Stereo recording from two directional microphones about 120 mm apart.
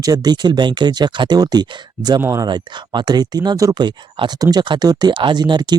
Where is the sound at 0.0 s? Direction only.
30° right (ahead or behind).